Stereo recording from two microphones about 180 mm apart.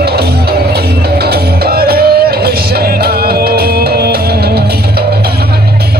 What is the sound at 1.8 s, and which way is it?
Music, 60° right (ahead or behind).